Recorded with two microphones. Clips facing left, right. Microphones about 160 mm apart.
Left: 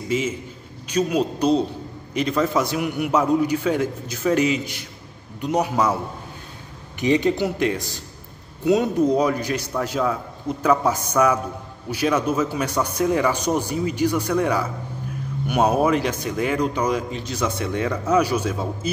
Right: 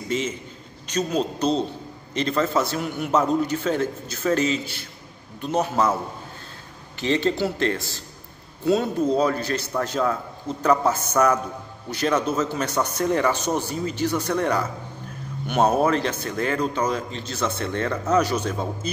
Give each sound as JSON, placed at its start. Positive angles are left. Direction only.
{"t": 0.1, "sound": "a man's voice", "side_deg": 10}
{"t": 7.0, "sound": "a man's voice", "side_deg": 15}